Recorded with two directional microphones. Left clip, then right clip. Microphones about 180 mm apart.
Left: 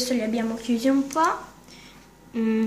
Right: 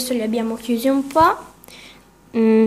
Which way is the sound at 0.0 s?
35° right (ahead or behind).